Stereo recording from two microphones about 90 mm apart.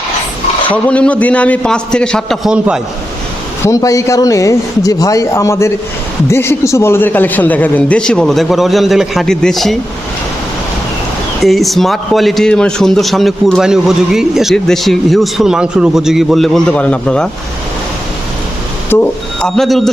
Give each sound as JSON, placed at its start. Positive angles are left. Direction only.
{"t": 0.7, "sound": "a man's voice", "side_deg": 15}
{"t": 2.5, "sound": "a man's voice", "side_deg": -10}
{"t": 3.6, "sound": "a man's voice", "side_deg": 40}
{"t": 11.4, "sound": "a man's voice", "side_deg": 0}
{"t": 16.6, "sound": "a man's voice", "side_deg": 15}
{"t": 18.9, "sound": "speech", "side_deg": 25}
{"t": 19.4, "sound": "a man's voice", "side_deg": 5}